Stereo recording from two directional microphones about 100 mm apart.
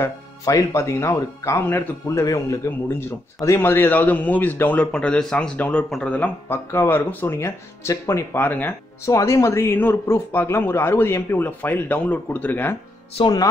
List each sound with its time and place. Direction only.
0.0 s a man's voice: 30° left (ahead or behind)
9.1 s speech: 30° left (ahead or behind)